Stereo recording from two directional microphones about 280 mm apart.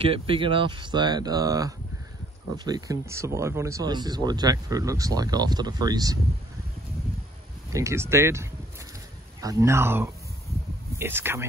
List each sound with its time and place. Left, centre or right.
0.0 s speech: centre
7.7 s speech: centre